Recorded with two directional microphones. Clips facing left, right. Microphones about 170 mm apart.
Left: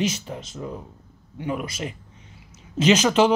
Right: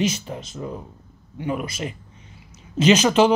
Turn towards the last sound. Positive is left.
turn(degrees=-15)  # may be behind; listen again after turning